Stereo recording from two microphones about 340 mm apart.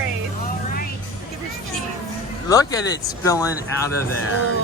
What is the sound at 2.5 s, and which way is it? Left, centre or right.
Speech, centre.